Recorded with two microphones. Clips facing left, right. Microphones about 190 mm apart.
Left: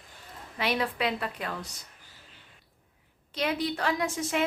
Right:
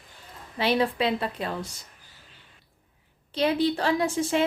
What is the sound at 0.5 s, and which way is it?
A woman's voice, 30° right (ahead or behind).